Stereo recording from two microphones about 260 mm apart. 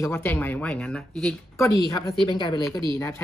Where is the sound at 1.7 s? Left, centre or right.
Centre.